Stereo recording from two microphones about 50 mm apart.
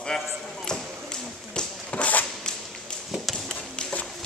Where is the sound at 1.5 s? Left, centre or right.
Left.